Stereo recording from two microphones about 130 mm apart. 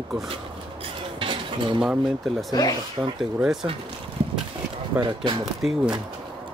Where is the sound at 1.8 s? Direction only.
Centre (ahead or behind).